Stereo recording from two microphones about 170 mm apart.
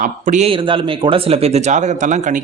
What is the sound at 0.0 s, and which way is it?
Speech, 50° right (ahead or behind).